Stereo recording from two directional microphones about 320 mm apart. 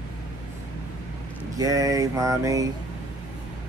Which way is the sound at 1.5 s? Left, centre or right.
Centre.